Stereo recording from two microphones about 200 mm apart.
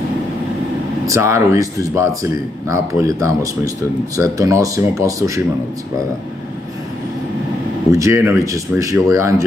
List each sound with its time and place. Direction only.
1.0 s speech: 15° right (ahead or behind)
7.9 s speech: 15° right (ahead or behind)